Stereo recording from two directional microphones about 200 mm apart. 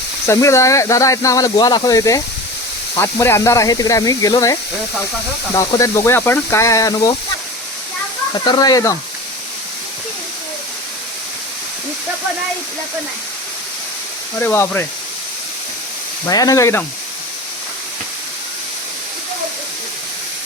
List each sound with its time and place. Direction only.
0.3 s speech: 15° left (ahead or behind)
5.5 s speech: 15° left (ahead or behind)
8.4 s speech: 20° left (ahead or behind)
14.3 s speech: 10° left (ahead or behind)
16.2 s speech: 15° left (ahead or behind)